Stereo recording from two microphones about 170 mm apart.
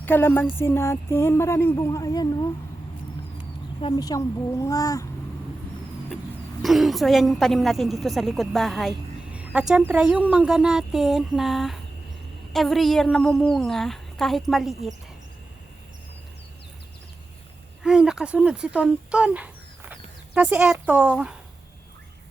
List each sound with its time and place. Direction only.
0.0 s speech: 10° left (ahead or behind)
3.8 s speech: 30° left (ahead or behind)
4.0 s a child's voice: 20° left (ahead or behind)
6.6 s a woman's voice: centre (ahead or behind)
17.8 s speech: 5° right (ahead or behind)